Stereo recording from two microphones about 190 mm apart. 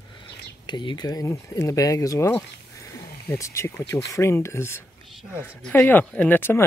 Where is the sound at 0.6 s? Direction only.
25° left (ahead or behind).